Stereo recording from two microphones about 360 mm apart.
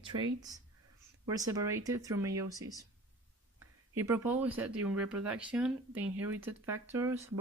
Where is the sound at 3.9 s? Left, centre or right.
Centre.